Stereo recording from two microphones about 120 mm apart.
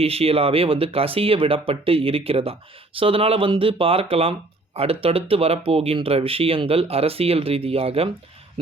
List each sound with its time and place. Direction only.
0.0 s speech: 55° right (ahead or behind)